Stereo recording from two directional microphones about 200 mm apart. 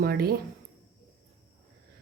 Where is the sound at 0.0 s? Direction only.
50° right (ahead or behind).